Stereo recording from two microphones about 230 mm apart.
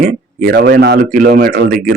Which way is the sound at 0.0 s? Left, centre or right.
Right.